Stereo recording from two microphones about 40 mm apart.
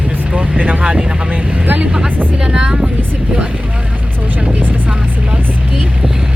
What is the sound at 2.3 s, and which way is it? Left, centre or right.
Speech, right.